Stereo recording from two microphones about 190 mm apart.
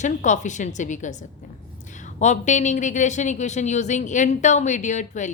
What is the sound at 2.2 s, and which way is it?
Speech, 40° left (ahead or behind).